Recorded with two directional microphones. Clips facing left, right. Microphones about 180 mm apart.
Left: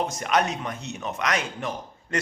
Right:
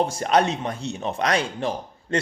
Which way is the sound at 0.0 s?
30° right (ahead or behind).